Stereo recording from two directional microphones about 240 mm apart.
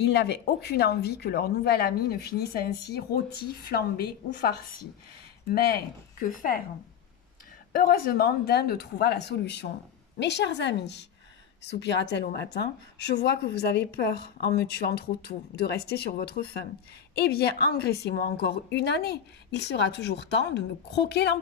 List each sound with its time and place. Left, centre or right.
0.0 s speech: left
7.7 s a woman's voice: left